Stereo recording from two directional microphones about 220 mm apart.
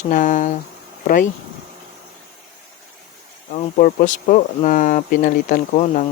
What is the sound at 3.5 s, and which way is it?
Speech, 35° left (ahead or behind).